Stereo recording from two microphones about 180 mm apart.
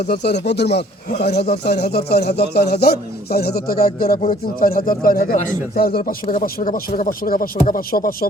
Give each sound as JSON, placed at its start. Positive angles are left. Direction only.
{"t": 0.2, "sound": "a man's voice", "side_deg": 70}